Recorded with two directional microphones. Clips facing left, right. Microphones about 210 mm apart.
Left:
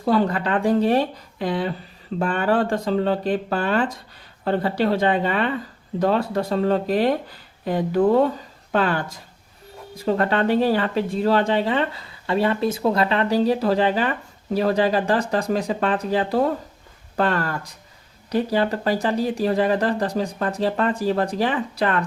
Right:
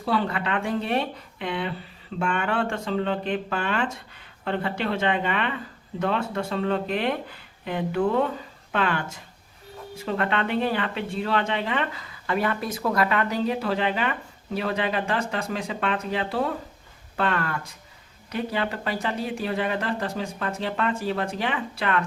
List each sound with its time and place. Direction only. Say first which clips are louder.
0.0 s speech: left 6 dB; 45° left (ahead or behind)